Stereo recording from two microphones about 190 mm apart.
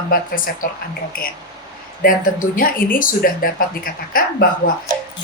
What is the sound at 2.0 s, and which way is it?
Speech, 45° left (ahead or behind).